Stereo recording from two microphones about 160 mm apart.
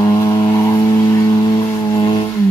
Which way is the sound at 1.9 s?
25° left (ahead or behind).